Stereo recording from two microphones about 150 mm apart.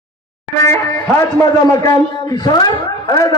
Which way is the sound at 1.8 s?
25° left (ahead or behind).